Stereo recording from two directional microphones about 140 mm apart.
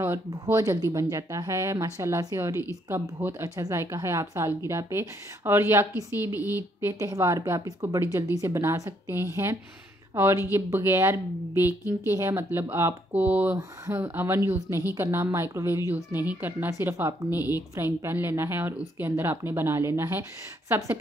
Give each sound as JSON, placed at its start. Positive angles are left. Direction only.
{"t": 0.0, "sound": "a woman's voice", "side_deg": -15}